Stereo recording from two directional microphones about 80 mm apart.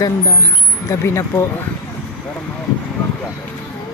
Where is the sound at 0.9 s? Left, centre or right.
Left.